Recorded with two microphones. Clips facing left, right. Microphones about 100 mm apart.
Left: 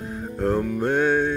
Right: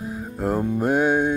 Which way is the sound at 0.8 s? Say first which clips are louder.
Right 2 dB; 10° right (ahead or behind).